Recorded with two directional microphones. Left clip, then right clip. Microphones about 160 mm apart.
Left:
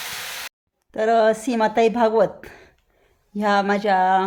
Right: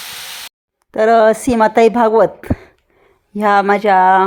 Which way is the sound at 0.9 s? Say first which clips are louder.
Right 7 dB; 30° right (ahead or behind).